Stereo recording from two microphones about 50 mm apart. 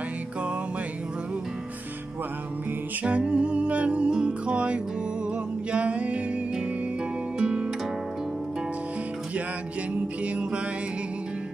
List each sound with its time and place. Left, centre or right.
3.0 s music: right
7.3 s music: centre
10.2 s music: right